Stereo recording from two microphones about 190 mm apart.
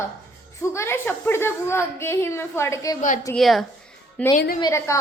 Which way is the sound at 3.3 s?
Centre (ahead or behind).